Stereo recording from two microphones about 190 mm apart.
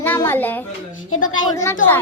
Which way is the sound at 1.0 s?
90° left.